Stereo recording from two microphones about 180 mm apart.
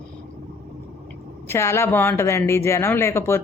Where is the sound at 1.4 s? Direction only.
15° left (ahead or behind).